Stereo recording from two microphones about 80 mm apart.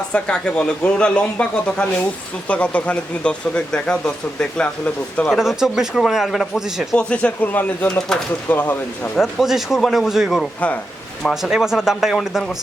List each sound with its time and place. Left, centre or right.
0.1 s speech: centre
5.3 s speech: centre
6.9 s speech: centre
7.9 s speech: centre
8.4 s speech: left
9.2 s speech: centre